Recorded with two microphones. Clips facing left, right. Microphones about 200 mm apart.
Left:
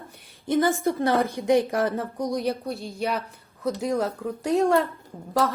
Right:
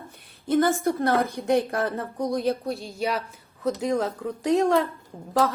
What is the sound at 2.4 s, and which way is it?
A woman's voice, centre (ahead or behind).